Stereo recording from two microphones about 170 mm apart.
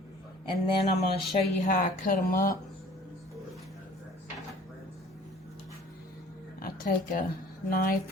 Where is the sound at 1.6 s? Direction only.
50° left (ahead or behind).